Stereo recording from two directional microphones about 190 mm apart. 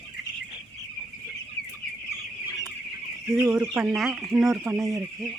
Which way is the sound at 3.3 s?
5° right (ahead or behind).